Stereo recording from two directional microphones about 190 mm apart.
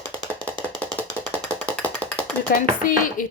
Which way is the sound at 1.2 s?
5° left (ahead or behind).